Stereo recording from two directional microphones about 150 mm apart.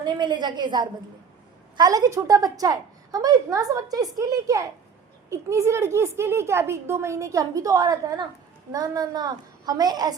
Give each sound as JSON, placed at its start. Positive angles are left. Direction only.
{"t": 0.0, "sound": "a woman's voice", "side_deg": -30}